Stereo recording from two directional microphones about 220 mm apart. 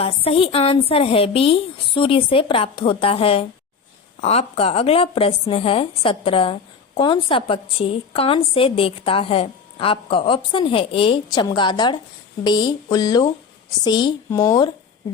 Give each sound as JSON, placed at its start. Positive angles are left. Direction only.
{"t": 0.0, "sound": "a woman's voice", "side_deg": 25}